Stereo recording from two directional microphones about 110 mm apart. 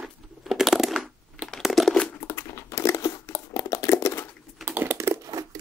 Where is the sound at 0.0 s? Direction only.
Centre (ahead or behind).